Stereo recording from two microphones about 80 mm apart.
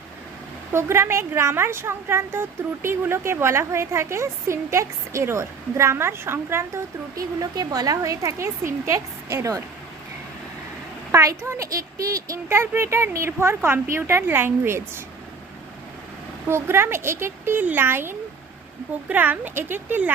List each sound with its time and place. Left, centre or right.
0.7 s speech: right
7.2 s a woman's voice: right
11.1 s speech: right
16.5 s speech: right